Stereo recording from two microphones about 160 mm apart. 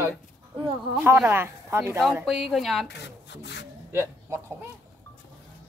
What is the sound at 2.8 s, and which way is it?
Speech, 90° left.